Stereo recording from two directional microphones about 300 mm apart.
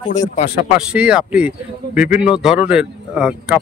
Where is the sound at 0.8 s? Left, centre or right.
Centre.